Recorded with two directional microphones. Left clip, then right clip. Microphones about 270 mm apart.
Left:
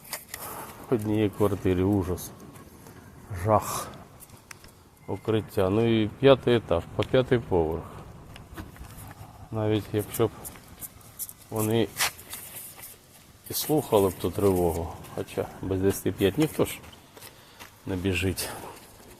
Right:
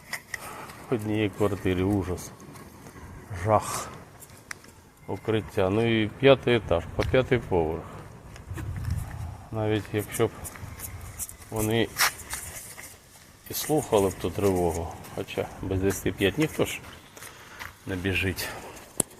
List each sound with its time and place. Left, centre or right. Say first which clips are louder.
0.4 s speech: left 1 dB; centre
3.3 s speech: even; centre
5.0 s speech: even; centre
9.6 s speech: left 1 dB; centre
11.5 s speech: even; centre
13.5 s speech: even; centre
17.8 s speech: even; centre